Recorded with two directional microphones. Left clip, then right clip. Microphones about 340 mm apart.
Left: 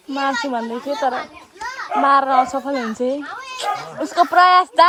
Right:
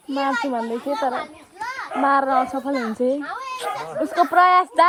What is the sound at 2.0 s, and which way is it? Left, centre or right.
Speech, centre.